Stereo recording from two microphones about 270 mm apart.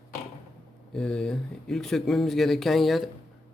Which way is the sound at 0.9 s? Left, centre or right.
Centre.